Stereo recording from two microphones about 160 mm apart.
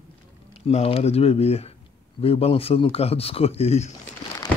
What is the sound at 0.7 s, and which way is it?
Speech, 40° left (ahead or behind).